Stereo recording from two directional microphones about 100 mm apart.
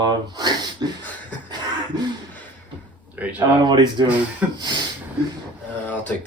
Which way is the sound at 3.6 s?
50° right (ahead or behind).